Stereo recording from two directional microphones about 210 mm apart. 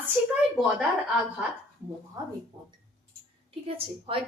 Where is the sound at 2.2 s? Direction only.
15° right (ahead or behind).